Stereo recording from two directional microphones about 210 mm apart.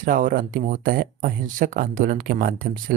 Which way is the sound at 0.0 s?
40° right (ahead or behind).